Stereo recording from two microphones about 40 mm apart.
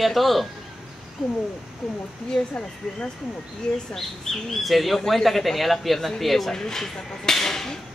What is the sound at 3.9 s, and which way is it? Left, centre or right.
Speech, centre.